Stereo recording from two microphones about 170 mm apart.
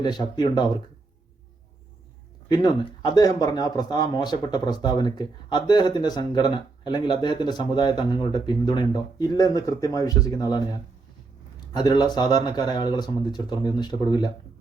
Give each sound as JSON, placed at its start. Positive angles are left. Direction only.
{"t": 0.0, "sound": "speech", "side_deg": 25}
{"t": 2.5, "sound": "speech", "side_deg": 25}